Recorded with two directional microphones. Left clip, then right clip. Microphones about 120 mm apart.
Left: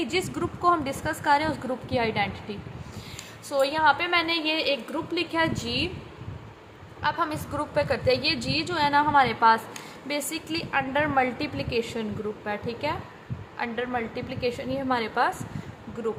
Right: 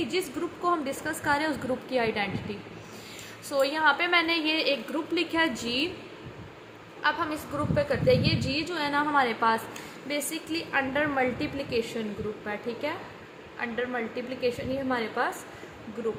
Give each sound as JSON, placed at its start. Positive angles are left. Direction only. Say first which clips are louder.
{"t": 0.0, "sound": "a woman's voice", "louder": "left 2 dB", "side_deg": 25}
{"t": 3.5, "sound": "a woman's voice", "louder": "left 2 dB", "side_deg": 20}
{"t": 7.0, "sound": "a woman's voice", "louder": "left 1 dB", "side_deg": 25}
{"t": 10.1, "sound": "a woman's voice", "louder": "left 2 dB", "side_deg": 30}